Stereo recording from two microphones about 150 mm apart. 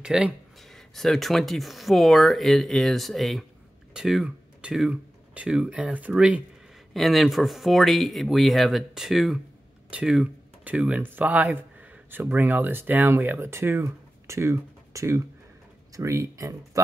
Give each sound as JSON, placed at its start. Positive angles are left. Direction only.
{"t": 0.0, "sound": "speech", "side_deg": -5}